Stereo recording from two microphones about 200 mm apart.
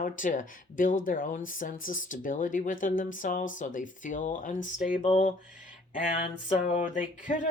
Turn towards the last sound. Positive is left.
turn(degrees=40)  # may be behind; listen again after turning